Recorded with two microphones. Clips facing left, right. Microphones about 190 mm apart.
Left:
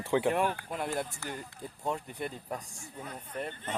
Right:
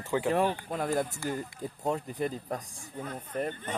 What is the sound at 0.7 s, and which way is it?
Speech, 40° right (ahead or behind).